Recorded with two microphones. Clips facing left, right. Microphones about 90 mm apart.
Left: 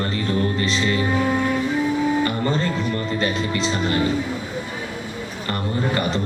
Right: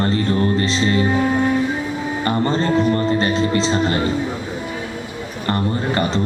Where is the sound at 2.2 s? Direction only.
35° right (ahead or behind).